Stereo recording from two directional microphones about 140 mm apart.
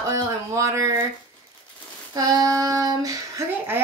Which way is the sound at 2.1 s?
25° right (ahead or behind).